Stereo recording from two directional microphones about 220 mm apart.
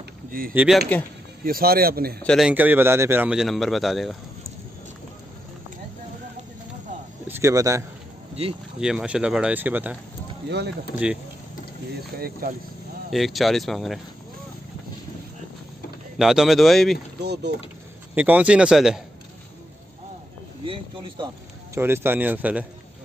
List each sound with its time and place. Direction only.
0.6 s a man's voice: centre (ahead or behind)
1.4 s speech: 40° right (ahead or behind)
2.2 s a man's voice: centre (ahead or behind)
7.2 s speech: 10° right (ahead or behind)
8.4 s speech: 30° right (ahead or behind)
8.7 s a man's voice: 5° right (ahead or behind)
12.2 s speech: 40° right (ahead or behind)
13.1 s a man's voice: centre (ahead or behind)
16.2 s a man's voice: centre (ahead or behind)
17.2 s speech: 50° right (ahead or behind)
18.1 s a man's voice: 5° right (ahead or behind)
20.6 s speech: 25° right (ahead or behind)
21.7 s speech: 10° right (ahead or behind)